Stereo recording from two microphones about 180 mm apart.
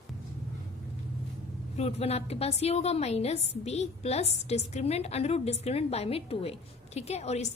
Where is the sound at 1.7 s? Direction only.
35° left (ahead or behind).